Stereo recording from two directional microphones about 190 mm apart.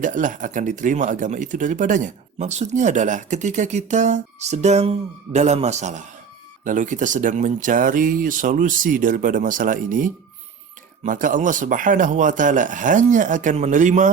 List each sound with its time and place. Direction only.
0.0 s speech: 45° right (ahead or behind)